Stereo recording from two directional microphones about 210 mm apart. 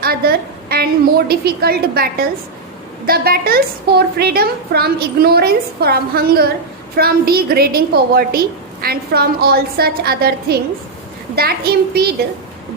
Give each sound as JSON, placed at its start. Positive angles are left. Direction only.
{"t": 0.0, "sound": "a woman's voice", "side_deg": -45}